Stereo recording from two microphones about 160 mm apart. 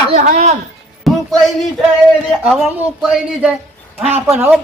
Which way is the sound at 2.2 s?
5° right (ahead or behind).